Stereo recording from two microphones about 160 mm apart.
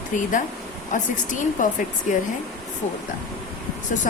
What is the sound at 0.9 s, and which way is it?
A woman's voice, 50° left (ahead or behind).